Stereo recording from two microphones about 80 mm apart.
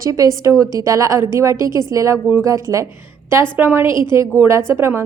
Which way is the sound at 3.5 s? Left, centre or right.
Right.